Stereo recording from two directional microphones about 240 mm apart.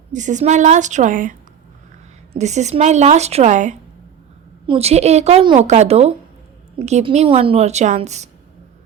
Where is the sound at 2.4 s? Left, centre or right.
Right.